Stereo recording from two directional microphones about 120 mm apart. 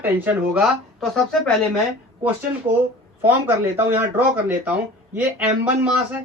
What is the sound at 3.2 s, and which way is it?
Speech, 15° right (ahead or behind).